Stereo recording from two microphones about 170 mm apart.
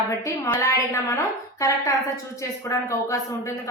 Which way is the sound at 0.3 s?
20° left (ahead or behind).